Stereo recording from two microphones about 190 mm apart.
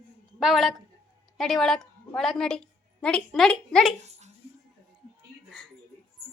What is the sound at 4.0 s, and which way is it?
Dog, 35° right (ahead or behind).